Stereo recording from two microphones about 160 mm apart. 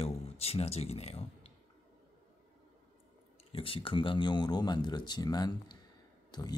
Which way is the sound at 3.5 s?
35° left (ahead or behind).